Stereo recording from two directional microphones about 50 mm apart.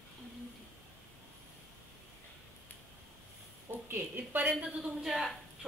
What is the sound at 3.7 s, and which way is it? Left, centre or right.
Speech, right.